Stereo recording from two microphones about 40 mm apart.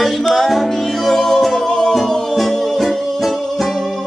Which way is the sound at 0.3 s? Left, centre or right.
Centre.